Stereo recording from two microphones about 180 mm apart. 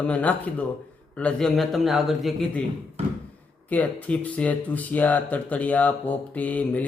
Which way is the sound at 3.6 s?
10° left (ahead or behind).